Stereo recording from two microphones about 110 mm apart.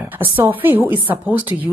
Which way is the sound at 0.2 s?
15° right (ahead or behind).